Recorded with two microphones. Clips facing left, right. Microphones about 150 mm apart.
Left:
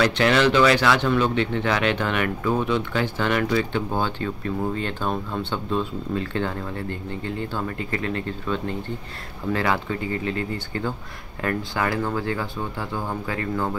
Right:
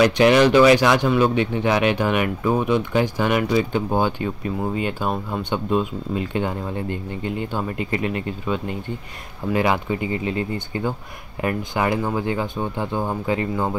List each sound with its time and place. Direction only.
0.0 s speech: 15° right (ahead or behind)